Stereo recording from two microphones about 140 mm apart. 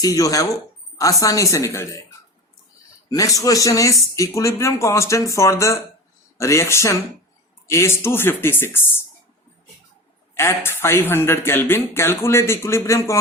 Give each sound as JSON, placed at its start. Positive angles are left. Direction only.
{"t": 0.0, "sound": "speech", "side_deg": 25}
{"t": 10.3, "sound": "speech", "side_deg": 15}